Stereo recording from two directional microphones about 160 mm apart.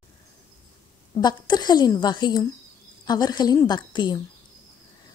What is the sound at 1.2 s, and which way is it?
A woman's voice, 25° left (ahead or behind).